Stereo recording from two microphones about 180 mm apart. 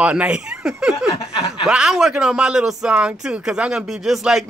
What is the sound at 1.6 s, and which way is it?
Speech, 5° right (ahead or behind).